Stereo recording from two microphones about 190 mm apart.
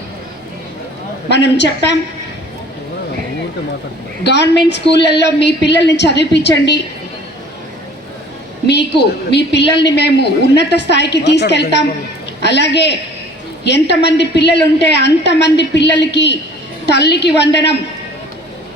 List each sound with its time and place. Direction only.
1.3 s a woman's voice: 65° left (ahead or behind)
4.2 s a woman's voice: 65° left (ahead or behind)
8.6 s a woman's voice: 65° left (ahead or behind)